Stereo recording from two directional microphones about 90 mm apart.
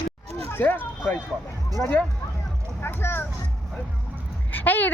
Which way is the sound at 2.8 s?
25° left (ahead or behind).